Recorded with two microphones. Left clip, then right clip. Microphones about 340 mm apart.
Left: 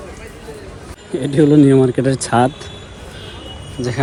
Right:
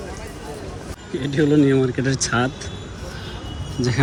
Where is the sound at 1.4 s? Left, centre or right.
Left.